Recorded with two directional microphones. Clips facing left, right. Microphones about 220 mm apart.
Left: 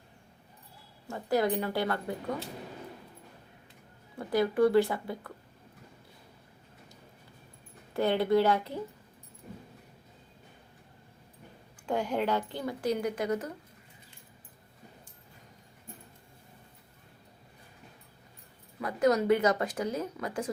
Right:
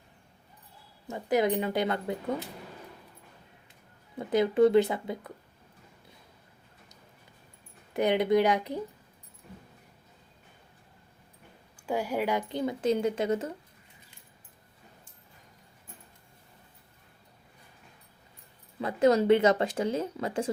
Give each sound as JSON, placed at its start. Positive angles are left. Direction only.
{"t": 1.0, "sound": "speech", "side_deg": -20}
{"t": 4.2, "sound": "speech", "side_deg": -20}
{"t": 7.9, "sound": "speech", "side_deg": -15}
{"t": 11.9, "sound": "speech", "side_deg": -10}
{"t": 18.8, "sound": "speech", "side_deg": -25}